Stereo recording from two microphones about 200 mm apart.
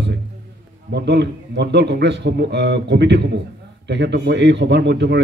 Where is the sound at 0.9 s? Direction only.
60° right (ahead or behind).